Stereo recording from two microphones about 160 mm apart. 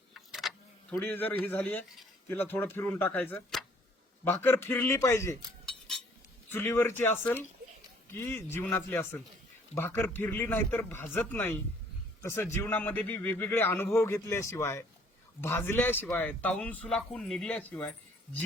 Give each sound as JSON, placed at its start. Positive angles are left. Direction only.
{"t": 0.1, "sound": "vehicle", "side_deg": 0}
{"t": 0.9, "sound": "a man's voice", "side_deg": 10}
{"t": 6.5, "sound": "a man's voice", "side_deg": 15}